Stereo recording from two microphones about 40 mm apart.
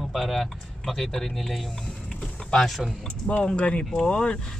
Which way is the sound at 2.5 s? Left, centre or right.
Centre.